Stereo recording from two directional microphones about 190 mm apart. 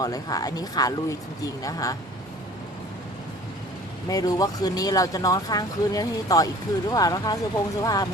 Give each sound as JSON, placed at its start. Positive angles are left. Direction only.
{"t": 0.0, "sound": "speech", "side_deg": 20}
{"t": 4.1, "sound": "speech", "side_deg": 20}